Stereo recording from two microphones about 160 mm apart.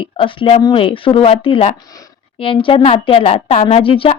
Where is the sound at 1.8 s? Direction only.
20° left (ahead or behind).